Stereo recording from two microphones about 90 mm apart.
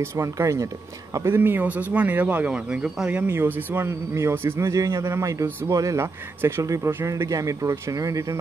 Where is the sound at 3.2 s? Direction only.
25° right (ahead or behind).